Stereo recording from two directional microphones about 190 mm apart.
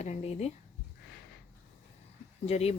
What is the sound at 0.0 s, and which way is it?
Speech, 35° left (ahead or behind).